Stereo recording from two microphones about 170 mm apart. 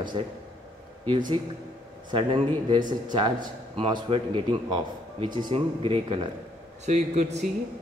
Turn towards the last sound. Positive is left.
turn(degrees=-40)  # may be behind; listen again after turning